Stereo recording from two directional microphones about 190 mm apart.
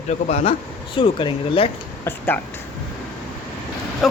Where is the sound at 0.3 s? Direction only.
35° left (ahead or behind).